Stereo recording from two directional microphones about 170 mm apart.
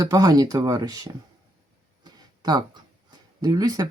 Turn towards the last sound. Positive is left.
turn(degrees=-20)  # may be behind; listen again after turning